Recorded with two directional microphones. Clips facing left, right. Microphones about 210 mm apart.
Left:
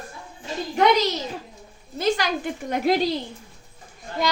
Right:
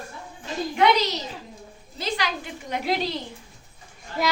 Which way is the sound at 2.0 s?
50° left (ahead or behind).